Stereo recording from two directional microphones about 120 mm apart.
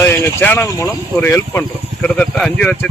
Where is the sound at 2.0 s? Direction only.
10° left (ahead or behind).